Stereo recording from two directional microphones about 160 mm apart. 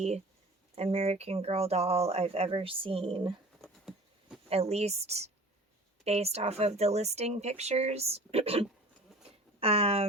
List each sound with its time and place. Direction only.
0.8 s speech: 40° right (ahead or behind)
3.6 s patter: centre (ahead or behind)
4.4 s speech: 40° right (ahead or behind)